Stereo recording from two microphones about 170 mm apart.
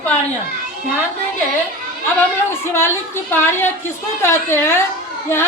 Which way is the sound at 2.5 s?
15° left (ahead or behind).